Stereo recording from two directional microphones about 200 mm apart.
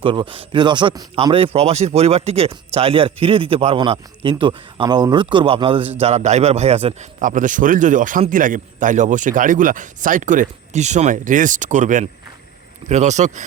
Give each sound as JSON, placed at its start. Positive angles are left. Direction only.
{"t": 0.0, "sound": "a man's voice", "side_deg": -25}